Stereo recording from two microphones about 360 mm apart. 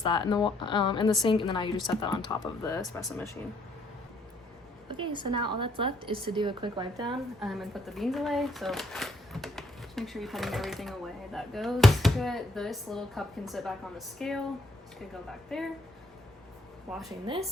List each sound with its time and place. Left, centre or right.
0.0 s speech: centre
4.9 s a woman's voice: centre
7.4 s speech: centre
15.4 s speech: centre
16.9 s speech: centre